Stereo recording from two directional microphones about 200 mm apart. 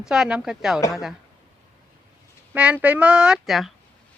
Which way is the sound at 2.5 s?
5° right (ahead or behind).